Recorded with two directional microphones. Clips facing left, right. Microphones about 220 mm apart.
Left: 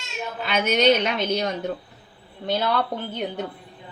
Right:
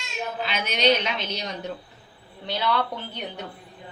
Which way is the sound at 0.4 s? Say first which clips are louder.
Left 5 dB; 50° left (ahead or behind).